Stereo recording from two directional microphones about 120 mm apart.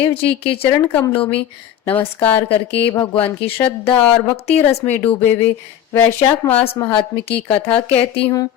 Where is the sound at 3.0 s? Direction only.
45° left (ahead or behind).